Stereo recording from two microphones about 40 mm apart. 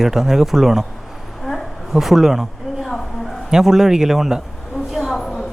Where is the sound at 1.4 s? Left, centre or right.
Centre.